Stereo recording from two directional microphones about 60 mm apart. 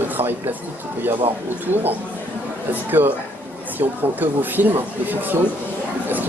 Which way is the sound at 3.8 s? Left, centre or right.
Right.